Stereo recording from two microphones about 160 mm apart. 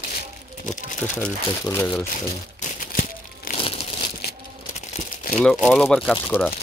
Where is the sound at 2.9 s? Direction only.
60° left (ahead or behind).